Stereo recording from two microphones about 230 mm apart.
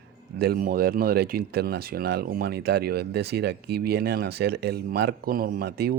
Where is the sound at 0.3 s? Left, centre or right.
Right.